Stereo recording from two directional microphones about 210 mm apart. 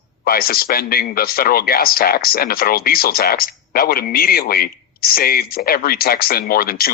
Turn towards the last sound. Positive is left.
turn(degrees=45)  # may be behind; listen again after turning